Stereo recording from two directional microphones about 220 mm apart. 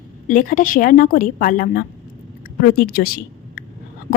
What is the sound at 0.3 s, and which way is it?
A woman's voice, 35° left (ahead or behind).